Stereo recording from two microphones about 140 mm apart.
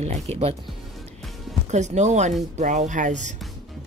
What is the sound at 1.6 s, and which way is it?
Speech, 55° right (ahead or behind).